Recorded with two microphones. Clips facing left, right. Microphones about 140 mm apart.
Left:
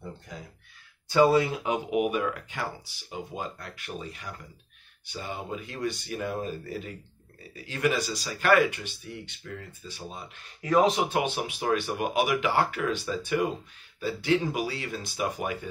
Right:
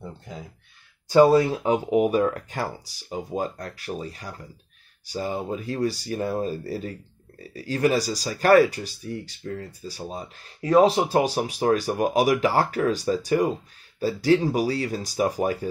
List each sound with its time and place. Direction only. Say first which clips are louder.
1.3 s speech: right 5 dB; 35° right (ahead or behind)